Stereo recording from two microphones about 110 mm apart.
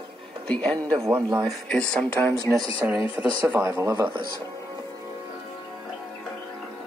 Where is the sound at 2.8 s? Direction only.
15° right (ahead or behind).